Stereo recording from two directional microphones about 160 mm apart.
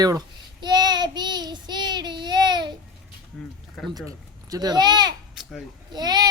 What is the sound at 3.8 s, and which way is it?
Speech, centre (ahead or behind).